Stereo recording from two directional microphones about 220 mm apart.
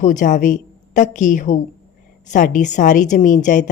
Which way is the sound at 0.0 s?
35° left (ahead or behind).